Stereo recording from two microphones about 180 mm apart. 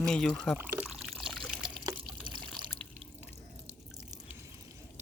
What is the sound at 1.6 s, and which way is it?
Water, 25° right (ahead or behind).